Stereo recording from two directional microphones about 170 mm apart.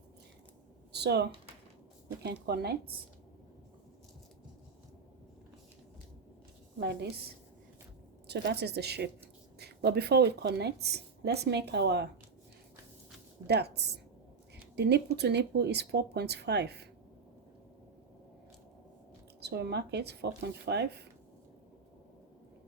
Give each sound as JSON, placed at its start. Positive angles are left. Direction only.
{"t": 0.9, "sound": "a woman's voice", "side_deg": -75}
{"t": 6.7, "sound": "a woman's voice", "side_deg": -75}
{"t": 8.3, "sound": "a woman's voice", "side_deg": -75}
{"t": 13.5, "sound": "a woman's voice", "side_deg": -75}
{"t": 19.4, "sound": "a woman's voice", "side_deg": -75}